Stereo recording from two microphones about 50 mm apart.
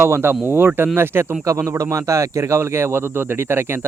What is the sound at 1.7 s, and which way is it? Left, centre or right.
Speech, right.